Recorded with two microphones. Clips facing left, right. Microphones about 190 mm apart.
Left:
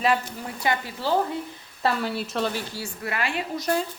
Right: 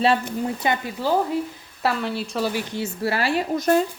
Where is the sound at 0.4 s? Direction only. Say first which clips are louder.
Right 3 dB; 20° right (ahead or behind).